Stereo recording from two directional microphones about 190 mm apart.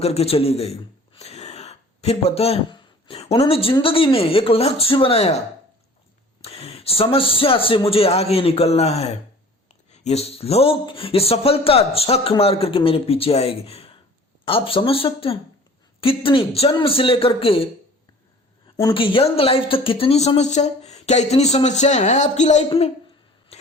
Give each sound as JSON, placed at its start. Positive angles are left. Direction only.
{"t": 0.0, "sound": "a man's voice", "side_deg": 35}
{"t": 6.4, "sound": "a man's voice", "side_deg": 30}
{"t": 18.8, "sound": "speech", "side_deg": 25}
{"t": 23.5, "sound": "a sound", "side_deg": 35}